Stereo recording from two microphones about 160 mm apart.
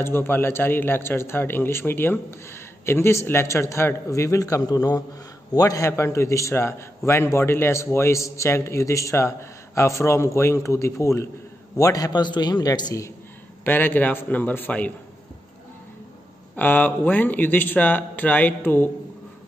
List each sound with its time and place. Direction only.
0.0 s a man's voice: 15° left (ahead or behind)
13.7 s a man's voice: 10° left (ahead or behind)
16.5 s a man's voice: 10° left (ahead or behind)